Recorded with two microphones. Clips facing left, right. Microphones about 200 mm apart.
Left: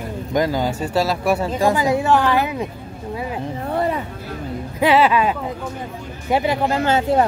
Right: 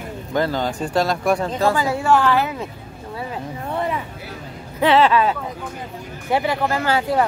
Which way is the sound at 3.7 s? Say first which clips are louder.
Left 3 dB; 35° left (ahead or behind).